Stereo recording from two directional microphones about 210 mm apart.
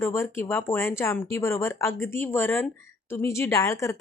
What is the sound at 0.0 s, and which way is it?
Speech, 10° left (ahead or behind).